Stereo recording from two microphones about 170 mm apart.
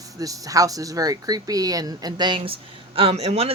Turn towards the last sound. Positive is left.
turn(degrees=-35)  # may be behind; listen again after turning